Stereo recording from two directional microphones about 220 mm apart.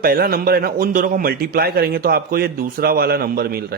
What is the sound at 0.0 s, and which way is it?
A man's voice, 45° right (ahead or behind).